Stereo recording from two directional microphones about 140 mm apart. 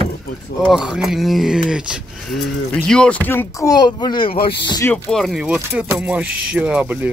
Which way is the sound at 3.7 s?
30° left (ahead or behind).